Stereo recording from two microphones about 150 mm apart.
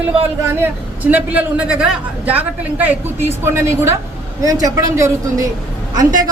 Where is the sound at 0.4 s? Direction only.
15° right (ahead or behind).